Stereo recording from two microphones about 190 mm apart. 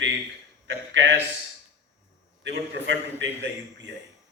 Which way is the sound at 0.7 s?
70° right (ahead or behind).